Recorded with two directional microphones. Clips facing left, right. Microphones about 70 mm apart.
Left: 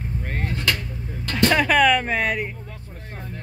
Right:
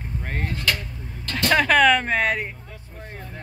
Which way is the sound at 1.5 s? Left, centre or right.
Centre.